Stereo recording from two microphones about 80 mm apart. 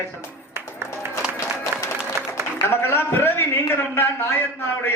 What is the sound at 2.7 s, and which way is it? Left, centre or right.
A man's voice, left.